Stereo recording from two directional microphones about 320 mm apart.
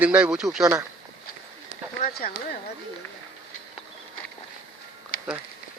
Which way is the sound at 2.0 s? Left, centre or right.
Left.